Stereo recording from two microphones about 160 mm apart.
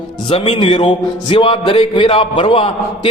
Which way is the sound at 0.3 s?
40° left (ahead or behind).